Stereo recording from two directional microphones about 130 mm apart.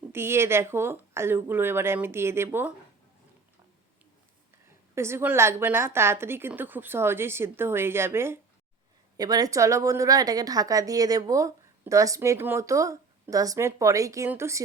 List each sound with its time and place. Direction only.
0.1 s a woman's voice: 20° right (ahead or behind)
4.9 s a woman's voice: 20° right (ahead or behind)
9.1 s a woman's voice: 30° right (ahead or behind)